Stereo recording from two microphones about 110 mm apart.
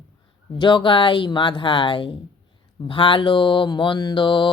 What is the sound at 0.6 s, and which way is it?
Mantra, 50° left (ahead or behind).